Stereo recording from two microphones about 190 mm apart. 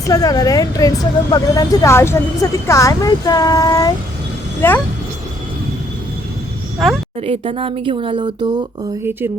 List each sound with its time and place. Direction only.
0.1 s a woman's voice: 20° left (ahead or behind)
6.8 s a woman's voice: centre (ahead or behind)
7.2 s speech: 30° right (ahead or behind)